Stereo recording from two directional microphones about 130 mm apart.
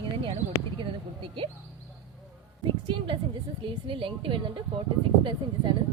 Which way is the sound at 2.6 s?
40° right (ahead or behind).